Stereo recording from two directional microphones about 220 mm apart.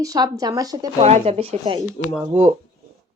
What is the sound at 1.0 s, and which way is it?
Speech, 30° right (ahead or behind).